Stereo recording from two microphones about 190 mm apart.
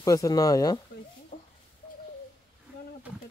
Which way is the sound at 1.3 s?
40° left (ahead or behind).